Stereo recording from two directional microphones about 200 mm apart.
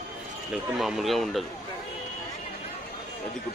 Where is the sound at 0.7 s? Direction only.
Centre (ahead or behind).